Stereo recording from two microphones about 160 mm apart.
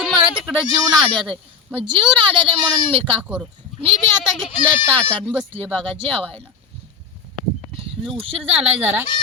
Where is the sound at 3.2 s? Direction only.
5° right (ahead or behind).